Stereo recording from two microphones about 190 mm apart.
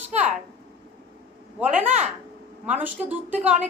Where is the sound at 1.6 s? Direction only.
5° right (ahead or behind).